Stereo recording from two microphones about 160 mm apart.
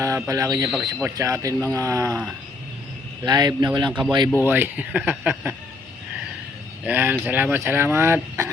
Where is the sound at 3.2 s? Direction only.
25° right (ahead or behind).